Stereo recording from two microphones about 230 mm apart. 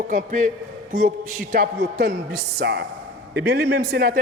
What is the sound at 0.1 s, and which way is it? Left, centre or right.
A man's voice, right.